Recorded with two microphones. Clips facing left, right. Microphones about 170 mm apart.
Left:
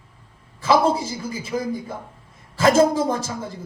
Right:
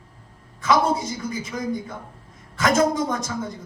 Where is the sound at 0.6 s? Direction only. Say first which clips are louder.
Left 2 dB; 30° left (ahead or behind).